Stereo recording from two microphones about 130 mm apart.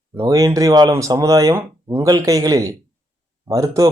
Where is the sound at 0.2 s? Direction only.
25° right (ahead or behind).